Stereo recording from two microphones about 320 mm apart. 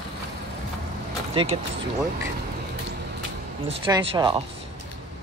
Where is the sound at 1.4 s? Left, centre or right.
Centre.